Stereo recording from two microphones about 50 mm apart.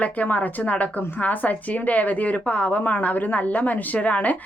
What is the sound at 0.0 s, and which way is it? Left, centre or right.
A woman's voice, left.